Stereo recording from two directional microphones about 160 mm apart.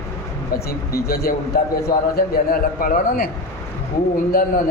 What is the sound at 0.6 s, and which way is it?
A man's voice, 75° left (ahead or behind).